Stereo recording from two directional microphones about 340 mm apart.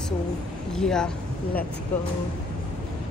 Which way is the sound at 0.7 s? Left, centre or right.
Centre.